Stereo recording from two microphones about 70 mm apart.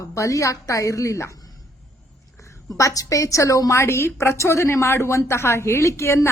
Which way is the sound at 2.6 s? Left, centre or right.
Left.